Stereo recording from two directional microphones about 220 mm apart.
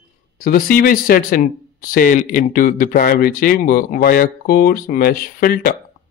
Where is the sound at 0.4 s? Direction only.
40° left (ahead or behind).